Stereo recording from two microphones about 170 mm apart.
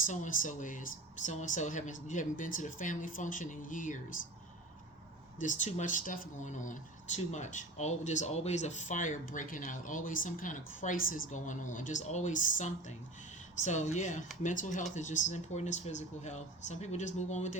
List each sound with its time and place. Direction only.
0.0 s speech: 50° left (ahead or behind)
5.4 s speech: 45° left (ahead or behind)